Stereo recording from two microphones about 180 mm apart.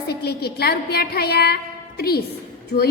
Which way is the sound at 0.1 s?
65° left (ahead or behind).